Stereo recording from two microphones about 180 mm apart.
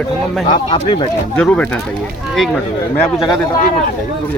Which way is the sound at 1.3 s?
5° left (ahead or behind).